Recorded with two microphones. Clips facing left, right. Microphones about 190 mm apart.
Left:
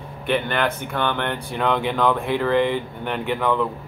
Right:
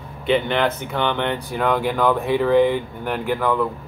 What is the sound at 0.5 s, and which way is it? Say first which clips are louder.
Speech: right 2 dB; centre (ahead or behind).